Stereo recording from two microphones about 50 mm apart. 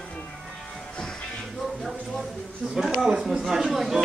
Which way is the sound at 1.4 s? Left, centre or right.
Centre.